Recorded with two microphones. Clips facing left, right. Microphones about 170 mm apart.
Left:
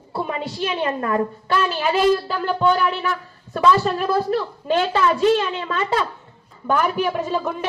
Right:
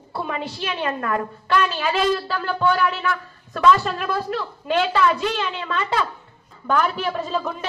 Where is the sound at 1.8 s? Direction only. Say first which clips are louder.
Left 3 dB; 15° left (ahead or behind); by 6.0 s 40° left (ahead or behind).